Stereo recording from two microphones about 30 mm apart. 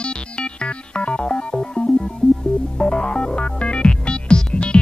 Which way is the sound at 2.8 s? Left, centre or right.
Left.